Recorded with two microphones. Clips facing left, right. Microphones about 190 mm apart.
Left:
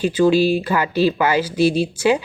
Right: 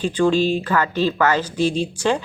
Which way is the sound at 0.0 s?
10° left (ahead or behind).